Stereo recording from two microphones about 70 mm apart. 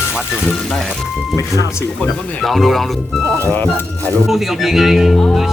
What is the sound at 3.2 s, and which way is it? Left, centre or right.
Speech, right.